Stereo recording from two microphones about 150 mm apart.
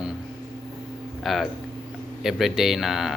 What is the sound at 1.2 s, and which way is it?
A man's voice, centre (ahead or behind).